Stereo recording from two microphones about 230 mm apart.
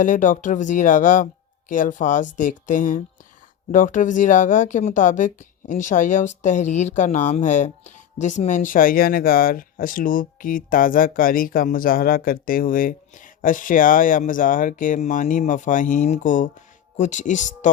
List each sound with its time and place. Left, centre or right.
0.0 s speech: left